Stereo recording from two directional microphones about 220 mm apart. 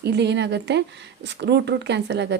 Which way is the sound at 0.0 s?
50° right (ahead or behind).